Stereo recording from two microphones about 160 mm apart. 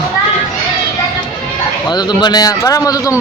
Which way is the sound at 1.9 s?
25° left (ahead or behind).